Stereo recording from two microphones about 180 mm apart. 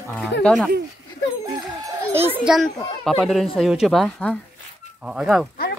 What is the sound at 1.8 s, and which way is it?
Speech, 15° right (ahead or behind).